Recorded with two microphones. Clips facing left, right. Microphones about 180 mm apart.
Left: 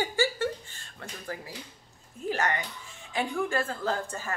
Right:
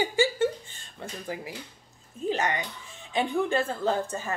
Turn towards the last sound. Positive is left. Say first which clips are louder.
# right 4 dB
turn(degrees=-20)  # may be behind; listen again after turning